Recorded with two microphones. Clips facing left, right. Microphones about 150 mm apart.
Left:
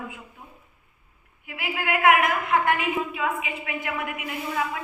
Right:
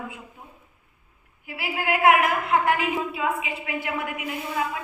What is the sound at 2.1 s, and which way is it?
A woman's voice, 30° right (ahead or behind).